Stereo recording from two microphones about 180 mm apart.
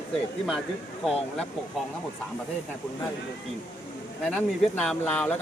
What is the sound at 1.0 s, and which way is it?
Speech, centre (ahead or behind).